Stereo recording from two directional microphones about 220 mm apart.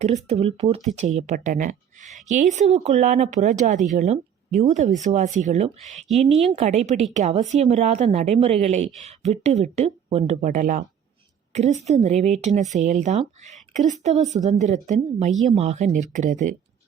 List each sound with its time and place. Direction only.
0.0 s a woman's voice: 30° right (ahead or behind)
15.3 s speech: centre (ahead or behind)
15.5 s a woman's voice: 30° right (ahead or behind)